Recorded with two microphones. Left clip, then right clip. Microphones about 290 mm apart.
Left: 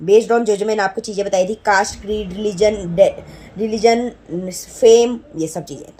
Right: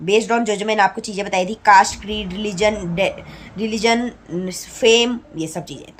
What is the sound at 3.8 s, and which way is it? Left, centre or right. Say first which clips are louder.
Speech: left 4 dB; centre.